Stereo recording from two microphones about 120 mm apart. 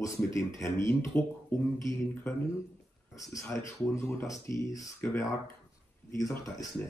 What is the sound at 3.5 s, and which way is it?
Speech, 25° left (ahead or behind).